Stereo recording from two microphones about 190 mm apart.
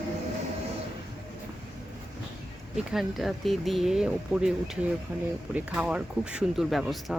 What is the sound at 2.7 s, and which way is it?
Speech, centre (ahead or behind).